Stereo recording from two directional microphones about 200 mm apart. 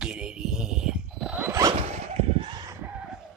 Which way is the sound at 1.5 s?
15° right (ahead or behind).